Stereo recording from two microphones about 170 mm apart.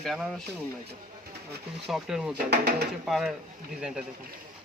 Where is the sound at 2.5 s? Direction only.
70° right (ahead or behind).